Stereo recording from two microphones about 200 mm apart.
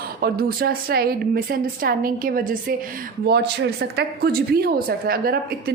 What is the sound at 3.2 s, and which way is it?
A woman's voice, 55° right (ahead or behind).